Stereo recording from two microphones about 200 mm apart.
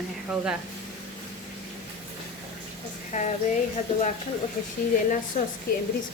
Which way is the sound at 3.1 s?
35° left (ahead or behind).